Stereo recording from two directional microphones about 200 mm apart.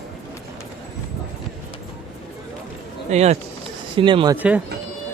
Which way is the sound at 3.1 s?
35° right (ahead or behind).